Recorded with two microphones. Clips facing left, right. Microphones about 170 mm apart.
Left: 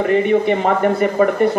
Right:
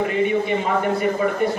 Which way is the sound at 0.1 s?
50° left (ahead or behind).